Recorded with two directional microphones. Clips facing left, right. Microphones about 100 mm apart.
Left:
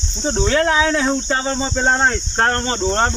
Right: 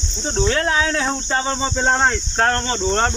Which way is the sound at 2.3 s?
35° left (ahead or behind).